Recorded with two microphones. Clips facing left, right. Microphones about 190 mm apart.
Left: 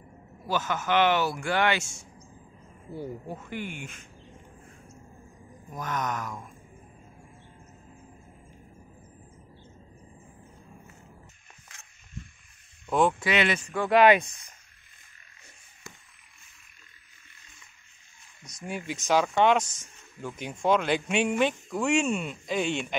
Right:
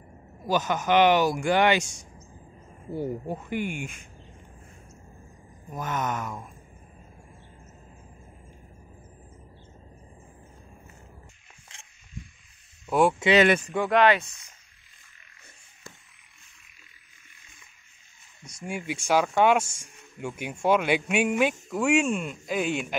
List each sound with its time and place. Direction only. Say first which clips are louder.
0.4 s speech: right 4 dB; 15° right (ahead or behind)
3.3 s speech: right 6 dB; 15° right (ahead or behind)
5.7 s speech: right 2 dB; 5° right (ahead or behind)
11.7 s a sound: right 3 dB; 25° right (ahead or behind)
12.8 s speech: right 2 dB; 5° right (ahead or behind)
13.4 s speech: right 8 dB; 45° right (ahead or behind)
13.8 s speech: left 2 dB; 10° left (ahead or behind)
18.4 s speech: right 1 dB; 10° right (ahead or behind)